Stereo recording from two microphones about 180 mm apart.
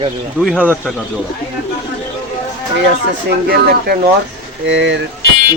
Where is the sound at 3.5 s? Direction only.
55° right (ahead or behind).